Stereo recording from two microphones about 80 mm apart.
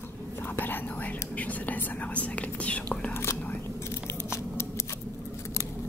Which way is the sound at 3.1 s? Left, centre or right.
Left.